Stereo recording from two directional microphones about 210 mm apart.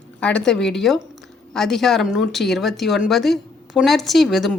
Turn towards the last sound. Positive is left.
turn(degrees=0)  # may be behind; listen again after turning